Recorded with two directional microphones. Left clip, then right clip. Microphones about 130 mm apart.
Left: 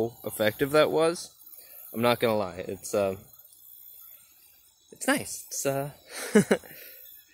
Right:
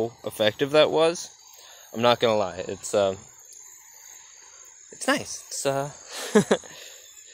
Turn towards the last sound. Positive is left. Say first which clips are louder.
# right 3 dB
turn(degrees=25)  # may be behind; listen again after turning